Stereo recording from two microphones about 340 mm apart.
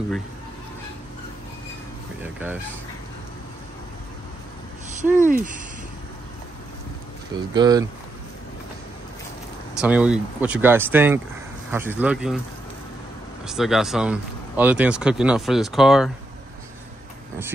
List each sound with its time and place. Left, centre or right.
5.1 s speech: right
7.3 s speech: centre
9.8 s speech: centre
13.5 s speech: centre